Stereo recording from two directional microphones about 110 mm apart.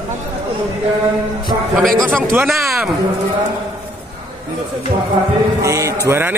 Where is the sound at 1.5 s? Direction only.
45° right (ahead or behind).